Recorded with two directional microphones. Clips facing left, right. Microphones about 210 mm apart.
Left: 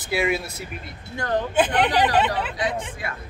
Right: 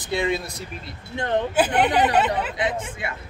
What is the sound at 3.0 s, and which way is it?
Speech, 25° right (ahead or behind).